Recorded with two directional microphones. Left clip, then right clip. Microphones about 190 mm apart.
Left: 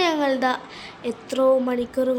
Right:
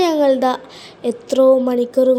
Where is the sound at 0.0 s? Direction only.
35° right (ahead or behind).